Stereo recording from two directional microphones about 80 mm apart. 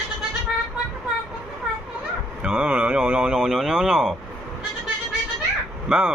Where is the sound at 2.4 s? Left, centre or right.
Centre.